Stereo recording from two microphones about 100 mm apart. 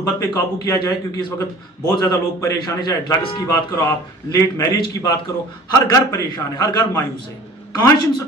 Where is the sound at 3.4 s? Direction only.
30° left (ahead or behind).